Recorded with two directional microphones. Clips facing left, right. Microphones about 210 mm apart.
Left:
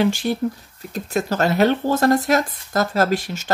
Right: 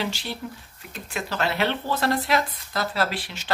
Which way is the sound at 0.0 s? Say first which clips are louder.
Left 11 dB; 50° left (ahead or behind).